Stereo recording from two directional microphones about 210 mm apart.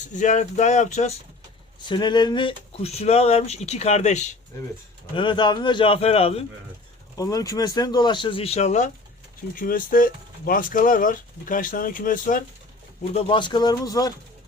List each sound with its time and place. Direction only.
0.1 s speech: 35° left (ahead or behind)
1.9 s speech: 20° left (ahead or behind)
5.1 s speech: 20° left (ahead or behind)
7.2 s speech: 15° left (ahead or behind); by 12.4 s 40° left (ahead or behind)
13.0 s speech: 25° left (ahead or behind)